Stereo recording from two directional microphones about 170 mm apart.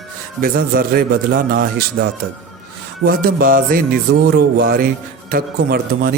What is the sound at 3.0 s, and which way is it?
Speech, 60° right (ahead or behind).